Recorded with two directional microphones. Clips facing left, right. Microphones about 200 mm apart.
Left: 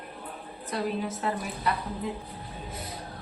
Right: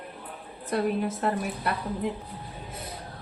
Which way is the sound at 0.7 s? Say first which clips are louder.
Right 4 dB; 55° right (ahead or behind).